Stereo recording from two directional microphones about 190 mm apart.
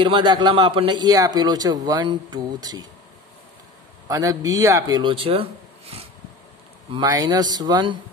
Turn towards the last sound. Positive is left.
turn(degrees=-25)  # may be behind; listen again after turning